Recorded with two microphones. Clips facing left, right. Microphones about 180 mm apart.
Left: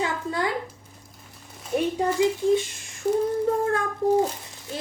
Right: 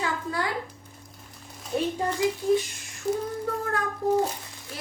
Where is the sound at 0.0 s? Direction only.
20° left (ahead or behind).